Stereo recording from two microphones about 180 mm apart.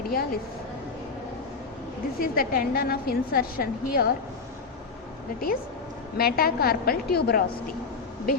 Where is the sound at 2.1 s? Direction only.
55° left (ahead or behind).